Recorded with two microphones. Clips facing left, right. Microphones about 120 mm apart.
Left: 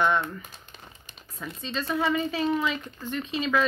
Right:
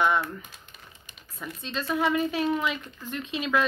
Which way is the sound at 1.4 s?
5° right (ahead or behind).